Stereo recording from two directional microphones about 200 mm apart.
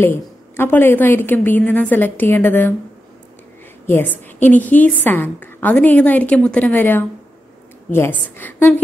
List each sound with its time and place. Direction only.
0.0 s a woman's voice: 10° left (ahead or behind)
3.8 s a woman's voice: 10° left (ahead or behind)